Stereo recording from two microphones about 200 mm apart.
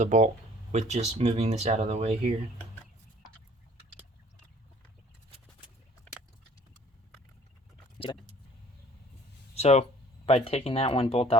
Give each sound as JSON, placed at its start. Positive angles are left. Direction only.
{"t": 0.0, "sound": "speech", "side_deg": -35}
{"t": 7.9, "sound": "speech", "side_deg": 25}
{"t": 9.6, "sound": "speech", "side_deg": 30}